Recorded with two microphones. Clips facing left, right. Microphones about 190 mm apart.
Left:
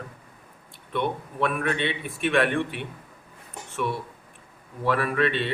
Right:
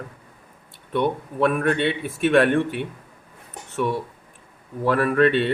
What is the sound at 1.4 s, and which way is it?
A man's voice, 40° right (ahead or behind).